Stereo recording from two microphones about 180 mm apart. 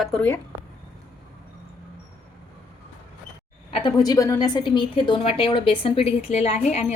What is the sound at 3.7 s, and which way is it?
A woman's voice, 25° left (ahead or behind).